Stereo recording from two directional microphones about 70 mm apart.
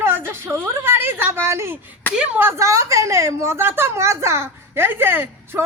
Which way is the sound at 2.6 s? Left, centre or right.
Right.